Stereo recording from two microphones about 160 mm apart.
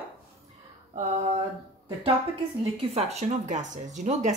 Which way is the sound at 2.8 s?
40° right (ahead or behind).